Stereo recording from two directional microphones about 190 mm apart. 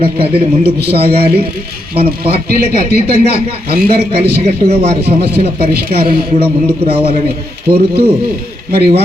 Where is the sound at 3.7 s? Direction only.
55° right (ahead or behind).